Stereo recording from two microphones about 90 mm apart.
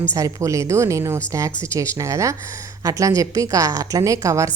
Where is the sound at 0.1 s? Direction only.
35° right (ahead or behind).